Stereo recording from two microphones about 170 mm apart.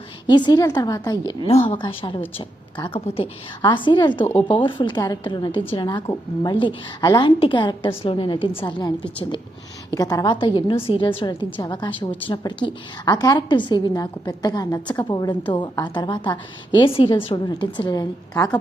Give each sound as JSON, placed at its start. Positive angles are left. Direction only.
{"t": 0.3, "sound": "a woman's voice", "side_deg": 25}
{"t": 1.5, "sound": "a woman's voice", "side_deg": 35}
{"t": 9.9, "sound": "a woman's voice", "side_deg": 20}